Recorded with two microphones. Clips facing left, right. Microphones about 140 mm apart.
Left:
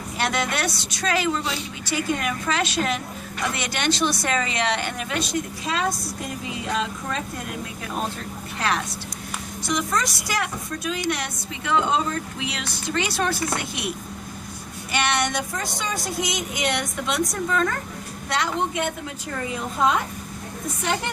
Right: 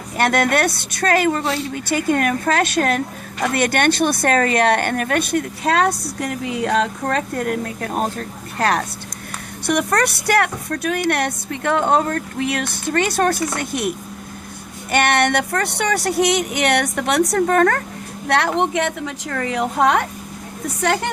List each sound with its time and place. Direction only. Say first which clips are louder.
0.2 s a woman's voice: right 8 dB; 55° right (ahead or behind)
9.6 s speech: right 7 dB; 65° right (ahead or behind)
14.9 s speech: right 7 dB; 55° right (ahead or behind); by 21.1 s 70° right (ahead or behind)